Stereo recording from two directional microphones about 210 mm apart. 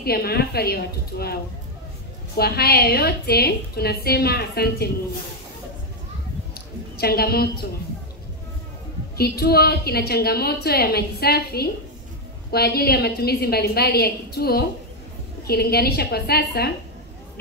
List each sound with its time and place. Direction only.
0.0 s a woman's voice: 50° left (ahead or behind)
7.0 s a woman's voice: 50° left (ahead or behind)
9.1 s a woman's voice: 50° left (ahead or behind)